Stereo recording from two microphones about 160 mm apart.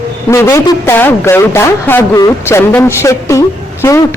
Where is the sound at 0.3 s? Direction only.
15° left (ahead or behind).